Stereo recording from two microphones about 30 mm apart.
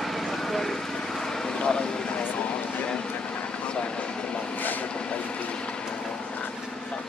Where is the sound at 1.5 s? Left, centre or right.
Left.